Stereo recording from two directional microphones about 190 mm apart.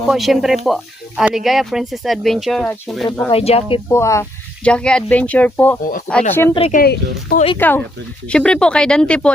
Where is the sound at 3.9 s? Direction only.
15° left (ahead or behind).